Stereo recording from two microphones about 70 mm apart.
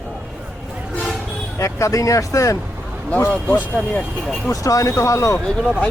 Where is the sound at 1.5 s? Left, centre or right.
Left.